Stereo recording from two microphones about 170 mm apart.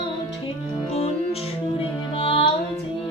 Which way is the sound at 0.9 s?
40° left (ahead or behind).